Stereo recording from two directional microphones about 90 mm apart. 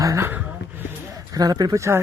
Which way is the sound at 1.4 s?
45° right (ahead or behind).